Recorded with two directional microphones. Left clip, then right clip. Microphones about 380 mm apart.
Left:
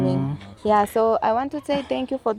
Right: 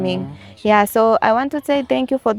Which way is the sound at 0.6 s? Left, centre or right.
Right.